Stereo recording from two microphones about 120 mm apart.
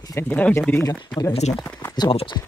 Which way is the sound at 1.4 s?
70° left (ahead or behind).